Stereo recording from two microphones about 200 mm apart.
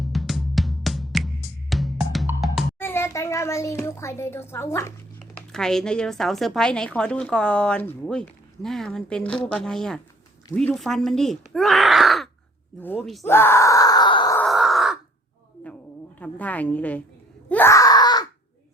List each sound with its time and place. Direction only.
0.0 s music: centre (ahead or behind)
2.7 s a child's voice: 10° left (ahead or behind)
5.2 s speech: 5° left (ahead or behind)
13.2 s groan: 10° left (ahead or behind)
14.3 s a sound: centre (ahead or behind)
16.2 s a woman's voice: 5° left (ahead or behind)
17.5 s groan: 10° left (ahead or behind)